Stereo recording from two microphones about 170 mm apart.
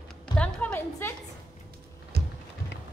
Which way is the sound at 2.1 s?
70° right (ahead or behind).